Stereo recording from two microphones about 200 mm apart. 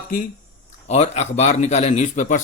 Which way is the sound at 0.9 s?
35° left (ahead or behind).